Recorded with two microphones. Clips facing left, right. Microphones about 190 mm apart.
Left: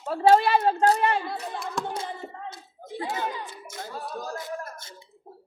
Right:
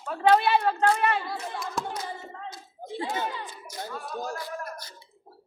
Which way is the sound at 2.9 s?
25° right (ahead or behind).